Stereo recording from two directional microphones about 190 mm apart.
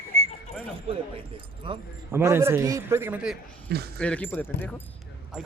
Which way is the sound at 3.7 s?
55° right (ahead or behind).